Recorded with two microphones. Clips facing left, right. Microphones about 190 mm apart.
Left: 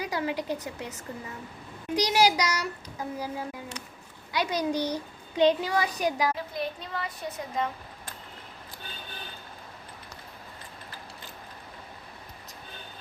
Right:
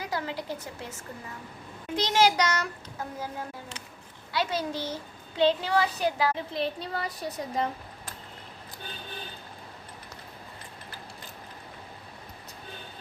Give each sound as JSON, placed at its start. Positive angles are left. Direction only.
{"t": 0.0, "sound": "a child's voice", "side_deg": 15}
{"t": 6.3, "sound": "speech", "side_deg": -30}